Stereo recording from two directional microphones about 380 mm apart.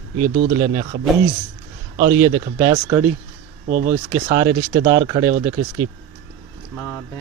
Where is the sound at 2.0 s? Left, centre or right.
Centre.